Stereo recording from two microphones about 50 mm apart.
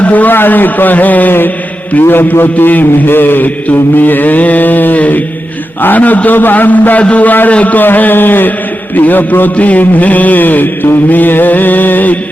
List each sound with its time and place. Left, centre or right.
0.0 s a man's voice: left